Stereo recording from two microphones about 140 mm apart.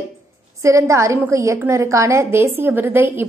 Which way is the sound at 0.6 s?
20° right (ahead or behind).